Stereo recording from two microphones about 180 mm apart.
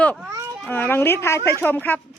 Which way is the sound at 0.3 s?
15° right (ahead or behind).